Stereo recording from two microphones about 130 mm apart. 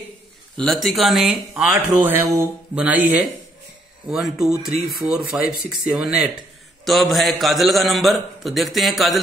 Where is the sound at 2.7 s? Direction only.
10° right (ahead or behind).